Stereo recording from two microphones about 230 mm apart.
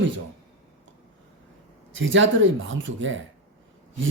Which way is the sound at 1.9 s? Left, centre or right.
Right.